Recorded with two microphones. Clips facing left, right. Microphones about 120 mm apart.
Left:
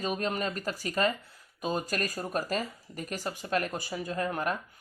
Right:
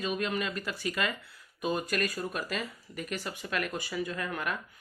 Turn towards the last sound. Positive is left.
turn(degrees=35)  # may be behind; listen again after turning